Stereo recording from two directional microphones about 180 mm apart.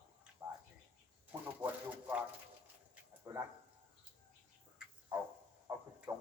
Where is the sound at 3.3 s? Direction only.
15° right (ahead or behind).